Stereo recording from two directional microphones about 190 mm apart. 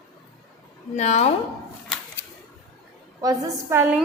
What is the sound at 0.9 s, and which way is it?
Speech, 35° left (ahead or behind).